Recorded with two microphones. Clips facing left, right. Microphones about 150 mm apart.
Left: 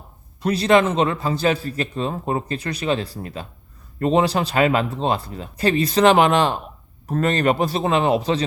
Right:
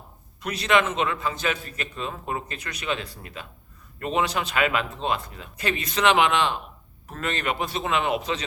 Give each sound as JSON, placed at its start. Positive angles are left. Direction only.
{"t": 0.4, "sound": "a man's voice", "side_deg": 35}